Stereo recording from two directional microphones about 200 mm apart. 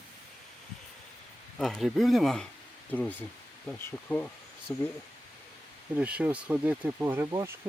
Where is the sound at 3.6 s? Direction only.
5° left (ahead or behind).